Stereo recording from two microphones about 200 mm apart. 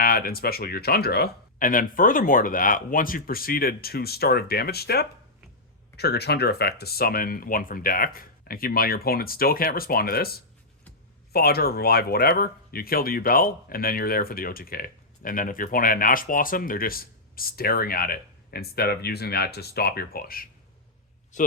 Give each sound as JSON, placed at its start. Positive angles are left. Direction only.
{"t": 0.0, "sound": "speech", "side_deg": 45}